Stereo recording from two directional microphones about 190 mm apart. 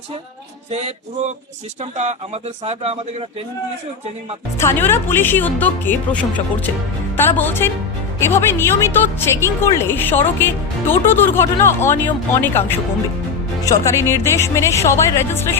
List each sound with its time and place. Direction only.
0.7 s speech: 35° right (ahead or behind)
4.5 s a woman's voice: 10° left (ahead or behind)